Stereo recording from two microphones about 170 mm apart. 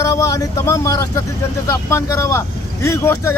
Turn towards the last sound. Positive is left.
turn(degrees=15)  # may be behind; listen again after turning